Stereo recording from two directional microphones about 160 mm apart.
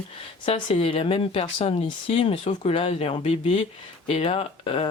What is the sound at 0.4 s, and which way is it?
Speech, 35° left (ahead or behind).